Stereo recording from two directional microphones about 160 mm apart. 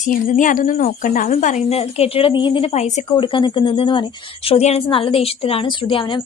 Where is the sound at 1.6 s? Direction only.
40° left (ahead or behind).